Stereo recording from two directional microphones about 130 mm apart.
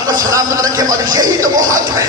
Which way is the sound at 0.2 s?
25° right (ahead or behind).